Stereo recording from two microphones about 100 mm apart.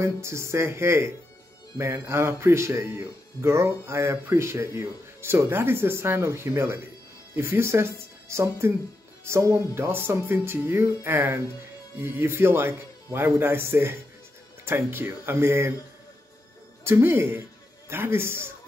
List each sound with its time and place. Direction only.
0.0 s speech: 30° right (ahead or behind)
16.8 s a man's voice: 25° right (ahead or behind)